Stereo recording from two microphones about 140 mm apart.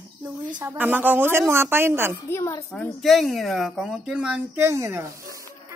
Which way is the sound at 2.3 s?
20° left (ahead or behind).